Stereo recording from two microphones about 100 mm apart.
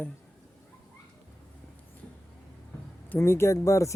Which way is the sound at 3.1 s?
25° left (ahead or behind).